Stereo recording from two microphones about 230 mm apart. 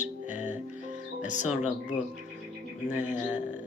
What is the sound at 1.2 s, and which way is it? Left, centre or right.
Mantra, left.